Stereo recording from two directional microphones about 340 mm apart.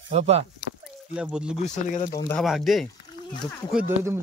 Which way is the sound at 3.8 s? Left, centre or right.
Centre.